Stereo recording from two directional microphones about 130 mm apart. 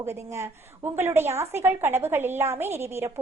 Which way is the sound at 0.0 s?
20° right (ahead or behind).